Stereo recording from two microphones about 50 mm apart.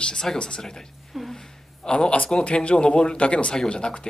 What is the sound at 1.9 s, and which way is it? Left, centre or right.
Speech, left.